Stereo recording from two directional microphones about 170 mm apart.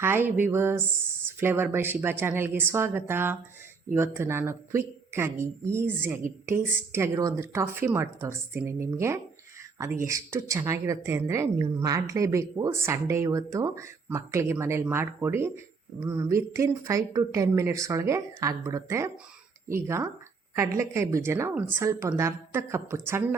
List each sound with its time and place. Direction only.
0.0 s a woman's voice: 15° right (ahead or behind)